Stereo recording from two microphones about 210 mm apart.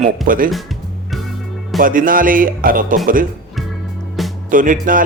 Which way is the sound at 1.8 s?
40° right (ahead or behind).